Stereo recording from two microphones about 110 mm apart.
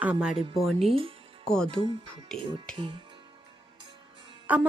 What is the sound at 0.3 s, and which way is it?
Speech, 60° right (ahead or behind).